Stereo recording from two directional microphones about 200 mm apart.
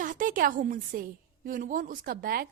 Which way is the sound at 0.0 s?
40° right (ahead or behind).